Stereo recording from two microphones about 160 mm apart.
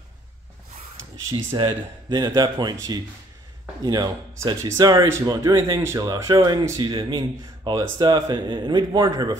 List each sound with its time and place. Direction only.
1.6 s speech: 30° right (ahead or behind)